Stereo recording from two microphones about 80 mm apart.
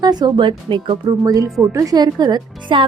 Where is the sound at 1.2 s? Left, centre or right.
Right.